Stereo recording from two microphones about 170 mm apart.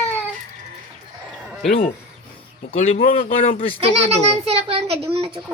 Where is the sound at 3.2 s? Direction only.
50° left (ahead or behind).